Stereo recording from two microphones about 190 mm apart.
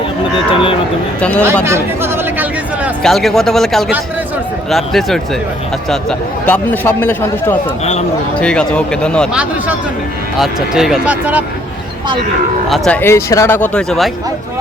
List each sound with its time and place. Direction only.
0.5 s speech: 30° left (ahead or behind)
1.2 s a man's voice: 5° left (ahead or behind)
1.6 s chatter: 15° right (ahead or behind)
3.0 s a man's voice: centre (ahead or behind)
12.6 s a man's voice: centre (ahead or behind)